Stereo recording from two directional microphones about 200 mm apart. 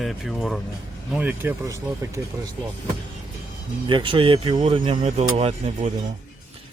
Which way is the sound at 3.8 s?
25° right (ahead or behind).